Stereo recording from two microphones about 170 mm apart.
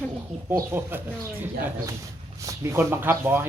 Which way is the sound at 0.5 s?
15° right (ahead or behind).